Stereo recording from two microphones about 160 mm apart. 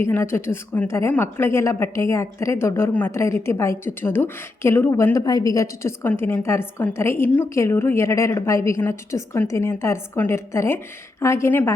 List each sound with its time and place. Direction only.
0.0 s a woman's voice: 15° left (ahead or behind)